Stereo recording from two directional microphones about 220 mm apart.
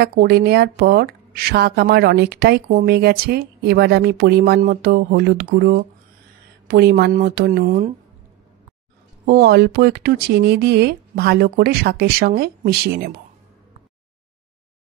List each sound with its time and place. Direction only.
0.0 s a woman's voice: 45° right (ahead or behind)
9.2 s a woman's voice: 45° right (ahead or behind)